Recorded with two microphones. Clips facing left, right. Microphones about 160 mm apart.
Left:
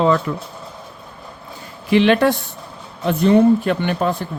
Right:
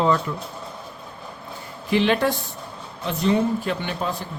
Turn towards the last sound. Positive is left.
turn(degrees=60)  # may be behind; listen again after turning